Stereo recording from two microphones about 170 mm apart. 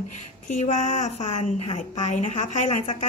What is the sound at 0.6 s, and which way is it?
A woman's voice, 45° left (ahead or behind).